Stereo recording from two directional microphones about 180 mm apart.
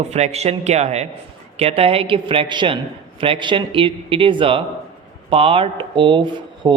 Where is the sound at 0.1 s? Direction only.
40° right (ahead or behind).